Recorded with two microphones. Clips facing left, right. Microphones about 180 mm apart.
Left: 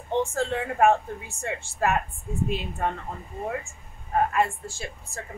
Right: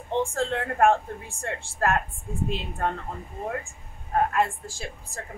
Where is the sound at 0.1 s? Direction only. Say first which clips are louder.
Even; 5° left (ahead or behind).